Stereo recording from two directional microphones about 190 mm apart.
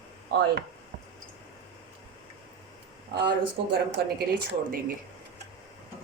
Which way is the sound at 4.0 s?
60° right (ahead or behind).